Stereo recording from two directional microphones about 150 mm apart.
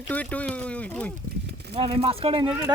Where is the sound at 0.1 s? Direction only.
10° left (ahead or behind).